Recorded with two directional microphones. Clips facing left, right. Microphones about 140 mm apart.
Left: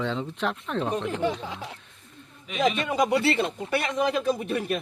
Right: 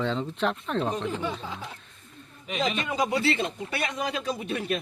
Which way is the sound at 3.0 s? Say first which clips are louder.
Left 3 dB; 60° left (ahead or behind).